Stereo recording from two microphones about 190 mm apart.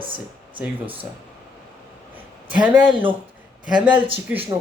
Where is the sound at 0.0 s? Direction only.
25° right (ahead or behind).